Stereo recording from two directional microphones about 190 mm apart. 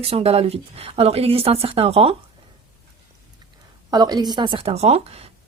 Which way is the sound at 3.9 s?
20° right (ahead or behind).